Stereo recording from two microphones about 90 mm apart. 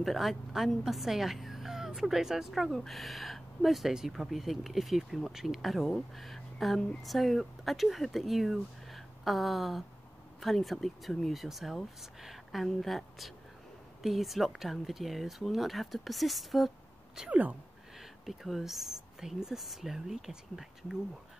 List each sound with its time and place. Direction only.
0.0 s a woman's voice: centre (ahead or behind)
17.2 s speech: 15° right (ahead or behind)
17.9 s a woman's voice: centre (ahead or behind)